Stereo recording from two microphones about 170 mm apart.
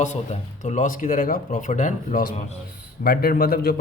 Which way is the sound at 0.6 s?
45° left (ahead or behind).